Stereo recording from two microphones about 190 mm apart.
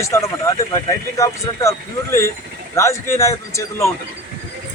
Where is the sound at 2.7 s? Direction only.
15° left (ahead or behind).